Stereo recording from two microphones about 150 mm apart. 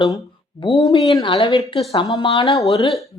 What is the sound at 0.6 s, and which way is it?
Speech, 30° left (ahead or behind).